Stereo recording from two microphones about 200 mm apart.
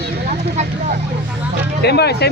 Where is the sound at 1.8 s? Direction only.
55° left (ahead or behind).